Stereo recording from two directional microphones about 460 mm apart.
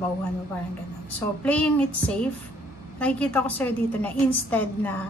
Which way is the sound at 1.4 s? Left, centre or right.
Centre.